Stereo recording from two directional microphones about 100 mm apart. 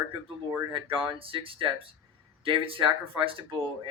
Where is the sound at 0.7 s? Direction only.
60° right (ahead or behind).